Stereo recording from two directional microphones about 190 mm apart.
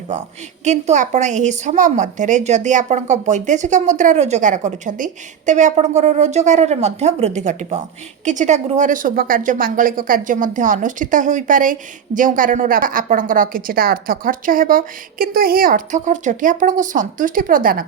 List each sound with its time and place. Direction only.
0.1 s a woman's voice: 40° right (ahead or behind)